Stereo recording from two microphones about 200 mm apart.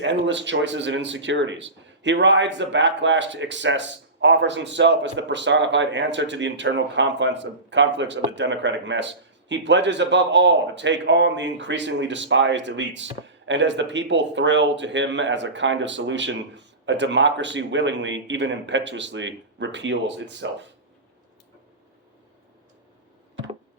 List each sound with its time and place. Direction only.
0.0 s speech: 65° right (ahead or behind)